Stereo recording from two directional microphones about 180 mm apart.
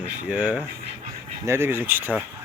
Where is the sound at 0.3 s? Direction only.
5° right (ahead or behind).